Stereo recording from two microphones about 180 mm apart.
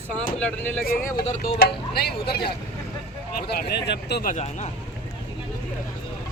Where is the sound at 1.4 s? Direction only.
55° left (ahead or behind).